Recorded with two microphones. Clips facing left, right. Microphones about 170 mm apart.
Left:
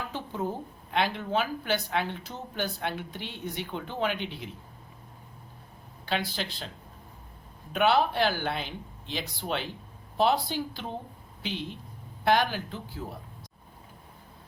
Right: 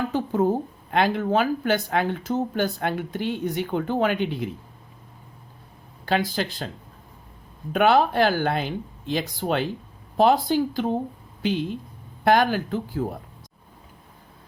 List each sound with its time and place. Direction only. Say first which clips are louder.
0.1 s a woman's voice: right 11 dB; 45° right (ahead or behind)
6.1 s a woman's voice: right 7 dB; 45° right (ahead or behind)
7.7 s a woman's voice: right 5 dB; 50° right (ahead or behind)
12.2 s a woman's voice: right 6 dB; 50° right (ahead or behind)